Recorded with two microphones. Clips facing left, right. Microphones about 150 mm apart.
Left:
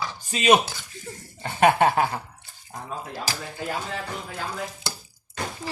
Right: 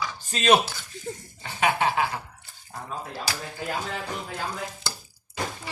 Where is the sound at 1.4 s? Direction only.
50° left (ahead or behind).